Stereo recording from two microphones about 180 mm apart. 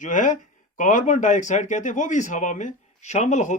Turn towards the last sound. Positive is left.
turn(degrees=40)  # may be behind; listen again after turning